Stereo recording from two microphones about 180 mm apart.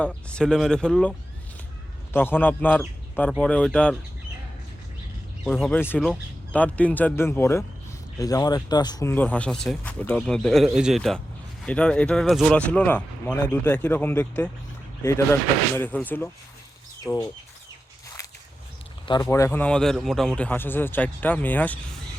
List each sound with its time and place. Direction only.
0.0 s speech: 5° left (ahead or behind)
2.1 s speech: 10° left (ahead or behind)
5.5 s speech: 5° left (ahead or behind)
19.0 s speech: 25° left (ahead or behind)
19.3 s speech: 15° left (ahead or behind)